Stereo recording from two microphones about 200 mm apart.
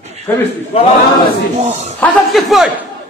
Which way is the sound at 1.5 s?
35° right (ahead or behind).